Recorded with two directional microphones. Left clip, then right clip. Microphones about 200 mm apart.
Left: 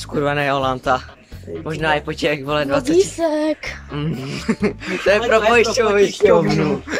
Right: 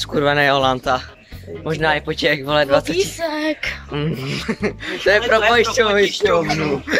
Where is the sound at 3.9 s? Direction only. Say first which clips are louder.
Right 3 dB; centre (ahead or behind).